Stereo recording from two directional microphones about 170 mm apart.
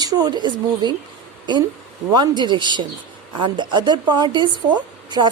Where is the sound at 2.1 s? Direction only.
25° right (ahead or behind).